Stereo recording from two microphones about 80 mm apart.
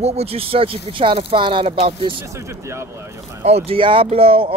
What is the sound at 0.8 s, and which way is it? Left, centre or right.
Speech, right.